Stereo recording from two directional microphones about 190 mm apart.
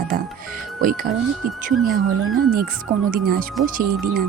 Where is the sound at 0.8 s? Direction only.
45° right (ahead or behind).